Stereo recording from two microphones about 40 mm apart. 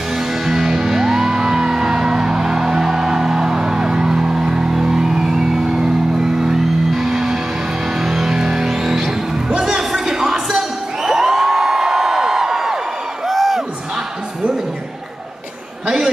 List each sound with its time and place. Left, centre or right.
0.3 s music: centre
4.7 s vehicle: centre
6.4 s music: centre
9.5 s crowd: centre
13.3 s music: centre